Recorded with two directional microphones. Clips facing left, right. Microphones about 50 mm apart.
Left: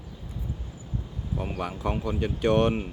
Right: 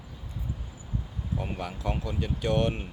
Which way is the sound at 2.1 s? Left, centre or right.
Left.